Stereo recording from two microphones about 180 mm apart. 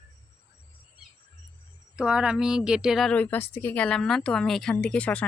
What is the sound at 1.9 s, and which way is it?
A woman's voice, 5° right (ahead or behind).